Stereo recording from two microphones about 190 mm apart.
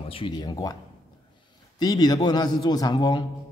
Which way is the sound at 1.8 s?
20° left (ahead or behind).